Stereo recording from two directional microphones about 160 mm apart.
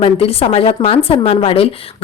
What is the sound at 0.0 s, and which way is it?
Speech, 35° left (ahead or behind).